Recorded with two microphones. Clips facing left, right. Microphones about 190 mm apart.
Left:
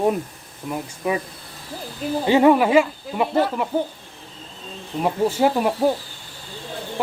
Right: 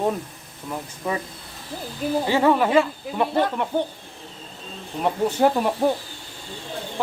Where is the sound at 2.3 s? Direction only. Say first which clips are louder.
Left 5 dB; 15° left (ahead or behind).